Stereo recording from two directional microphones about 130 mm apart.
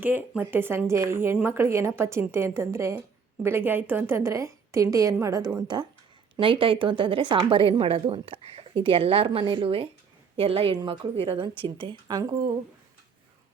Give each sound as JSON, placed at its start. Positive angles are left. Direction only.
{"t": 0.0, "sound": "a woman's voice", "side_deg": -15}